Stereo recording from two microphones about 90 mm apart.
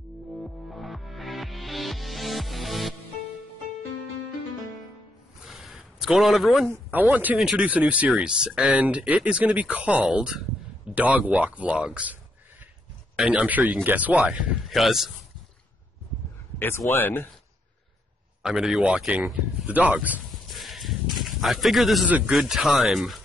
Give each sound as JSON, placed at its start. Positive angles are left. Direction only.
{"t": 0.4, "sound": "music", "side_deg": 0}
{"t": 5.4, "sound": "a sound", "side_deg": 0}
{"t": 6.9, "sound": "speech", "side_deg": -20}
{"t": 14.7, "sound": "speech", "side_deg": -5}
{"t": 16.5, "sound": "speech", "side_deg": 25}
{"t": 18.4, "sound": "speech", "side_deg": -5}
{"t": 20.2, "sound": "a sound", "side_deg": 0}
{"t": 22.2, "sound": "speech", "side_deg": -5}